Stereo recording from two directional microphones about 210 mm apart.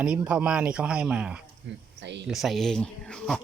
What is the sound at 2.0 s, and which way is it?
Speech, 55° right (ahead or behind).